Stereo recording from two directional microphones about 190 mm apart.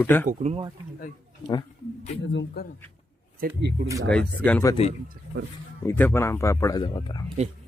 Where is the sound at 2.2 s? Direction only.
70° left (ahead or behind).